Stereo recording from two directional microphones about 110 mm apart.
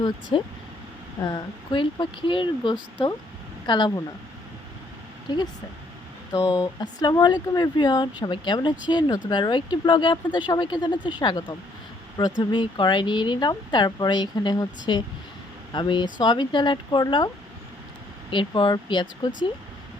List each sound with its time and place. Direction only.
0.0 s speech: 45° left (ahead or behind)
5.3 s speech: 40° left (ahead or behind)
6.3 s speech: 30° left (ahead or behind); by 19.5 s 45° left (ahead or behind)